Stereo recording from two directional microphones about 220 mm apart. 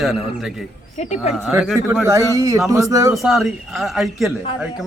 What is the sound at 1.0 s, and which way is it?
Speech, 30° left (ahead or behind).